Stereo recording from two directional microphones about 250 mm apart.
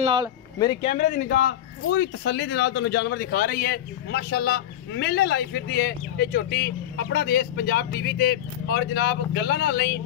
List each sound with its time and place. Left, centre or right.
0.0 s speech: right
0.8 s speech: left